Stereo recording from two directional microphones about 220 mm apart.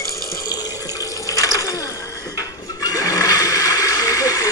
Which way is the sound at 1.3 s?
15° left (ahead or behind).